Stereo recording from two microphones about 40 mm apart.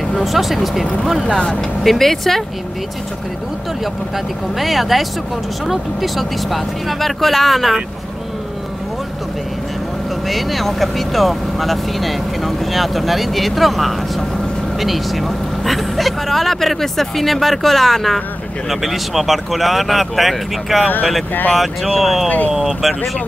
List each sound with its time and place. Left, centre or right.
0.1 s speech: centre
1.2 s speech: left
1.8 s speech: centre
4.6 s speech: centre
10.2 s speech: centre